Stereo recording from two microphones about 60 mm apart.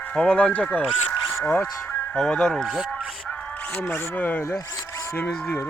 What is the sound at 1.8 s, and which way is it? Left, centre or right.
Music, left.